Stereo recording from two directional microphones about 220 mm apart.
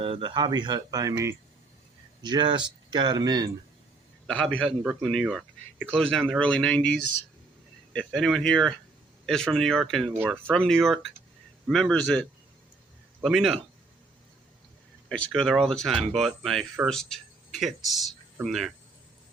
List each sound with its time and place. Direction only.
0.0 s speech: 20° right (ahead or behind)
4.6 s speech: centre (ahead or behind)
10.2 s speech: 10° right (ahead or behind)
10.5 s speech: centre (ahead or behind)
13.2 s speech: centre (ahead or behind)
15.1 s speech: 5° left (ahead or behind)